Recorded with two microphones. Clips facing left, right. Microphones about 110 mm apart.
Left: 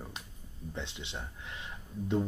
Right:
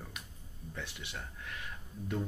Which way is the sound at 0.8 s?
20° left (ahead or behind).